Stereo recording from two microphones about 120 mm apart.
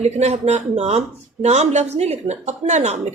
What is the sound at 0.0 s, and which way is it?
A woman's voice, 65° right (ahead or behind).